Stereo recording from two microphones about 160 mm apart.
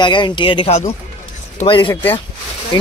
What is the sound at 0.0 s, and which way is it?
Speech, 30° left (ahead or behind).